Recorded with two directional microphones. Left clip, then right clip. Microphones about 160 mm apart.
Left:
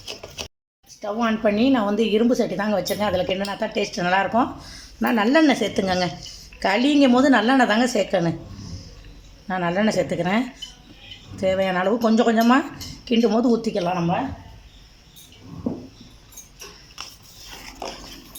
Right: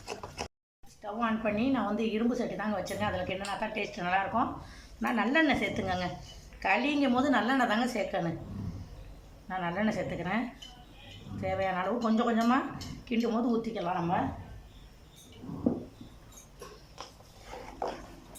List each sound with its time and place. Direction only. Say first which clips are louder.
1.0 s a woman's voice: left 10 dB; 65° left (ahead or behind)
9.5 s a woman's voice: left 10 dB; 65° left (ahead or behind)